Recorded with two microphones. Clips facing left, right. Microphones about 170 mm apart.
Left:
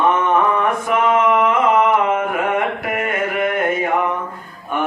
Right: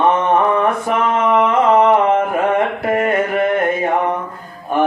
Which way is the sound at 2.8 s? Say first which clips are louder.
Right 5 dB; 35° right (ahead or behind).